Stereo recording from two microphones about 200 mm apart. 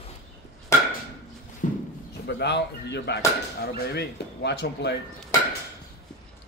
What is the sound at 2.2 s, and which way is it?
Speech, 60° left (ahead or behind).